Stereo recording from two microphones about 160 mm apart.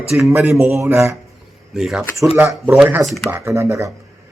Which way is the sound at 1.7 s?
Centre (ahead or behind).